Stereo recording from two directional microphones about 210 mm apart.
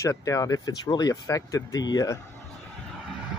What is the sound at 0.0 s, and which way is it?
Speech, 15° left (ahead or behind).